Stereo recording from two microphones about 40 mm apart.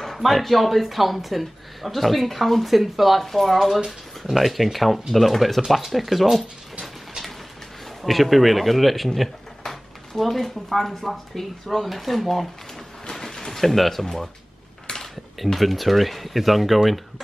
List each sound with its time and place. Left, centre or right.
0.0 s speech: centre
6.8 s a sound: centre
8.0 s speech: centre
13.0 s music: centre
14.9 s a sound: centre
15.3 s speech: centre